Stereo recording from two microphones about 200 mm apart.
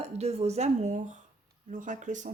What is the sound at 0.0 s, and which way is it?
Speech, 30° right (ahead or behind).